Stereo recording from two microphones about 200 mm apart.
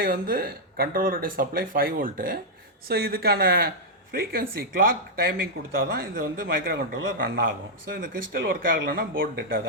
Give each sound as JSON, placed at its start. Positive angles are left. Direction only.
{"t": 0.0, "sound": "speech", "side_deg": -45}
{"t": 8.0, "sound": "speech", "side_deg": -45}
{"t": 8.4, "sound": "speech", "side_deg": -55}